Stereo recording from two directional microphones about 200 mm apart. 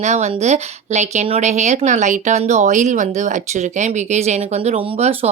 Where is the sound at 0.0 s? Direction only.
35° right (ahead or behind).